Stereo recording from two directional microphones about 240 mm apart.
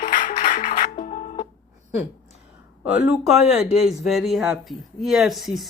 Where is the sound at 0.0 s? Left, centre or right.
Left.